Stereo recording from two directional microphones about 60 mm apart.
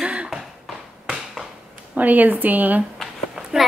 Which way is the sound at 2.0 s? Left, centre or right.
Right.